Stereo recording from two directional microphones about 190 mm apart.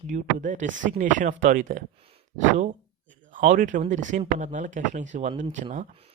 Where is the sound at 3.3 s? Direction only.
45° right (ahead or behind).